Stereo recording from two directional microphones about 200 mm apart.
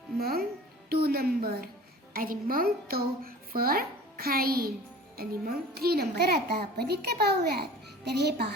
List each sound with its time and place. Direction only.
0.2 s music: 50° right (ahead or behind)
0.9 s a woman's voice: 50° right (ahead or behind)